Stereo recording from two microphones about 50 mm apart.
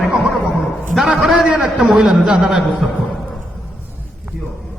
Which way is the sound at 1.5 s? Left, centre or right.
Centre.